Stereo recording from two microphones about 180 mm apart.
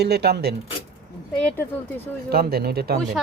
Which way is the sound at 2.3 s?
60° right (ahead or behind).